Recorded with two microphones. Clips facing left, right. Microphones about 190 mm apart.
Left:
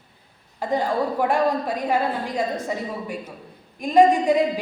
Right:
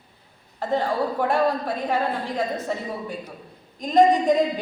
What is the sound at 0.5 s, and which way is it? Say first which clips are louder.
Speech: left 1 dB; 15° left (ahead or behind).